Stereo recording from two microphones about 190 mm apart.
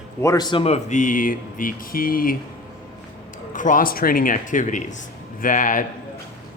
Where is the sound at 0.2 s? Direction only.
20° left (ahead or behind); by 2.3 s 50° left (ahead or behind).